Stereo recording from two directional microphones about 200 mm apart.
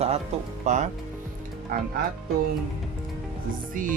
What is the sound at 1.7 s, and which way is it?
Speech, 50° right (ahead or behind).